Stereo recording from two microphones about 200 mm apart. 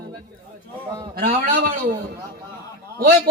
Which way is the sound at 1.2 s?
45° right (ahead or behind).